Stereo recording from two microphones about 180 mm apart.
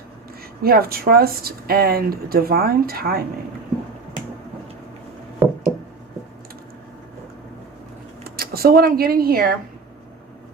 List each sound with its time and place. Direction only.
0.6 s speech: 55° right (ahead or behind)
5.4 s a sound: 10° right (ahead or behind)
8.2 s speech: 55° right (ahead or behind)